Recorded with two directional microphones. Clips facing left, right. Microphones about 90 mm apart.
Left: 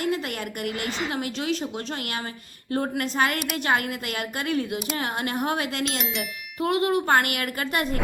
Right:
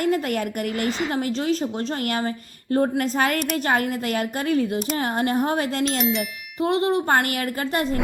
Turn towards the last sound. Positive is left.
turn(degrees=-30)  # may be behind; listen again after turning